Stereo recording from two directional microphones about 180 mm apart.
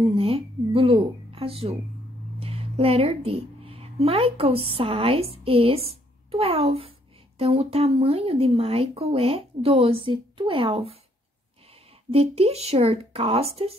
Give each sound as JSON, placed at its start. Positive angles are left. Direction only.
{"t": 0.0, "sound": "a woman's voice", "side_deg": -30}
{"t": 12.1, "sound": "speech", "side_deg": -35}